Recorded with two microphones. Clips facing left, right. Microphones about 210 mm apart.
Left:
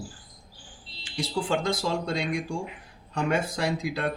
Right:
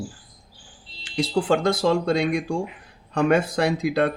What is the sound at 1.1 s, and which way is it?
Speech, 65° right (ahead or behind).